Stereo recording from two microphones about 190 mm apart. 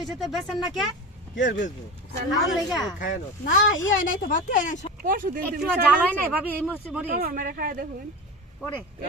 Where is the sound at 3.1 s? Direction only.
40° left (ahead or behind).